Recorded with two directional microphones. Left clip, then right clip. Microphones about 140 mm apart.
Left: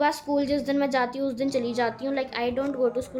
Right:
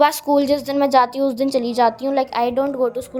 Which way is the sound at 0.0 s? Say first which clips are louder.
Right 9 dB; 65° right (ahead or behind).